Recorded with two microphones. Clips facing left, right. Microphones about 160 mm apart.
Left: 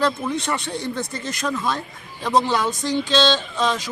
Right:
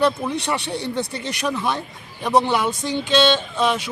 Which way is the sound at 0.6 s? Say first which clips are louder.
Right 1 dB; 65° right (ahead or behind).